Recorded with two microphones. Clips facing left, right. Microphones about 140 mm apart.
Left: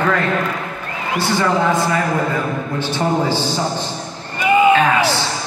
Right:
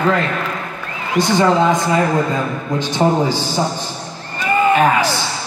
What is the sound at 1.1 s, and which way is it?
A man's voice, 15° right (ahead or behind).